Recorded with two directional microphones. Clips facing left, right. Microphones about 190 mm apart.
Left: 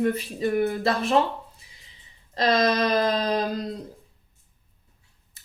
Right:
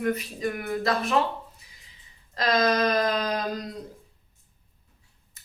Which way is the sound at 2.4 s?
25° left (ahead or behind).